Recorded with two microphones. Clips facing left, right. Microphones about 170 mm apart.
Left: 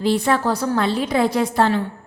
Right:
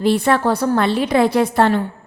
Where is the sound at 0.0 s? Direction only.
60° right (ahead or behind).